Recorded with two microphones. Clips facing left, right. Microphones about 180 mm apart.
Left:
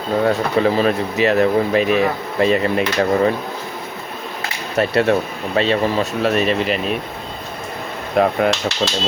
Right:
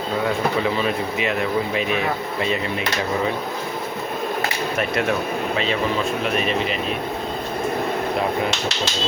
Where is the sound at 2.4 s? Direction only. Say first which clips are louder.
Left 9 dB; 50° left (ahead or behind).